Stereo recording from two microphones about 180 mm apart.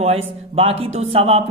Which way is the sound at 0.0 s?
35° right (ahead or behind).